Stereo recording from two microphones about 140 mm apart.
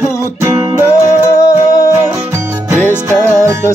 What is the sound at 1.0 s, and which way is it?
Music, 25° left (ahead or behind).